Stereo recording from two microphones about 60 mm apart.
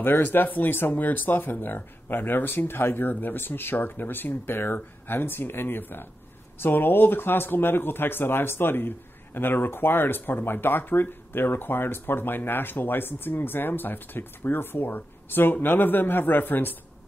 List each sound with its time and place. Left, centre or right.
0.0 s speech: left